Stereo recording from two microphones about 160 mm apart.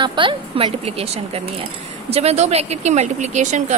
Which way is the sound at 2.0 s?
40° right (ahead or behind).